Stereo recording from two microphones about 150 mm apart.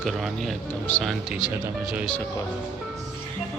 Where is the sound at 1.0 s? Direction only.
5° right (ahead or behind).